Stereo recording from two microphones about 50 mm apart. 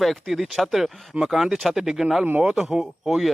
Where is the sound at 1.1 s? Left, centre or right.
Centre.